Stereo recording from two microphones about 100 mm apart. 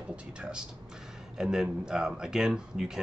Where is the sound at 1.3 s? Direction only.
5° right (ahead or behind).